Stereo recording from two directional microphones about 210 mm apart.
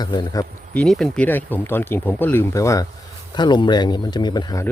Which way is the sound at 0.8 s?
Centre (ahead or behind).